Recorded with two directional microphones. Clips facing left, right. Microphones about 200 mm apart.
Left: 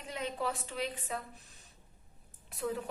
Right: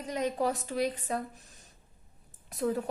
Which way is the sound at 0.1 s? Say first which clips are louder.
Right 6 dB; 40° right (ahead or behind).